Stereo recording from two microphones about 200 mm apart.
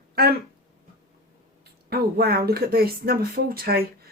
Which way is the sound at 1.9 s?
50° right (ahead or behind).